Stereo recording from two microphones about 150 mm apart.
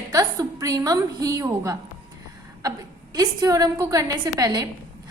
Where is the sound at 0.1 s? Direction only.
20° right (ahead or behind).